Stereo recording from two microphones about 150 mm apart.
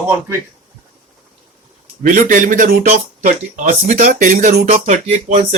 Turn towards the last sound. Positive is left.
turn(degrees=-55)  # may be behind; listen again after turning